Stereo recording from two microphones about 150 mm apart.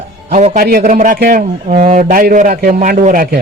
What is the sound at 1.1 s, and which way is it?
A man's voice, 75° right (ahead or behind).